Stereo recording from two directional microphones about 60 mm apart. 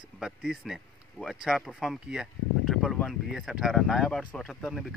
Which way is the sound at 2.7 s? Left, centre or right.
Centre.